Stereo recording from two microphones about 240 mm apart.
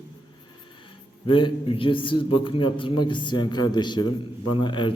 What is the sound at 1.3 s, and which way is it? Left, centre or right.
A man's voice, left.